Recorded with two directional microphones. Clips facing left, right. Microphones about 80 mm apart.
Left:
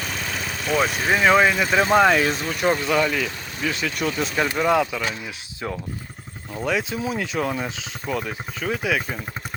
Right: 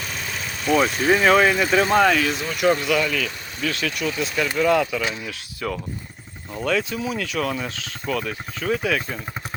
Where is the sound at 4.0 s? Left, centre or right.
Left.